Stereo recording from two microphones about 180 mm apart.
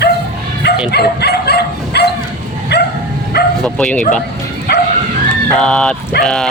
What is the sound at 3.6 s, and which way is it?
Speech, 5° left (ahead or behind).